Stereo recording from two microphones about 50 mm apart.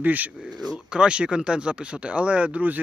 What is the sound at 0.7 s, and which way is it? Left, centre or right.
Speech, centre.